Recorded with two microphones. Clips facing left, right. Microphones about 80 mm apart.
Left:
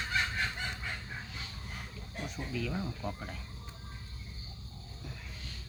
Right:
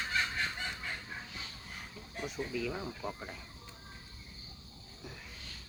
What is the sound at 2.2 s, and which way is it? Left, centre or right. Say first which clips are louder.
Speech: right 2 dB; centre.